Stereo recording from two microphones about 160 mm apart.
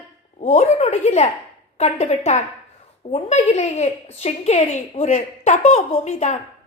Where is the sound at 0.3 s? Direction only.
45° left (ahead or behind).